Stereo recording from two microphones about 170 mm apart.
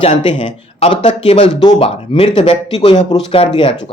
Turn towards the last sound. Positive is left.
turn(degrees=30)  # may be behind; listen again after turning